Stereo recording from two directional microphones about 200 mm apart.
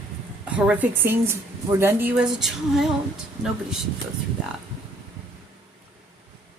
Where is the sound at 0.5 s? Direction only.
5° right (ahead or behind).